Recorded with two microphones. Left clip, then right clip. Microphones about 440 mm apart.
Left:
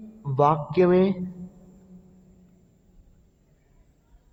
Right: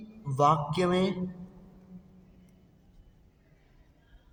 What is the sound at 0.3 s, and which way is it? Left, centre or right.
Speech, left.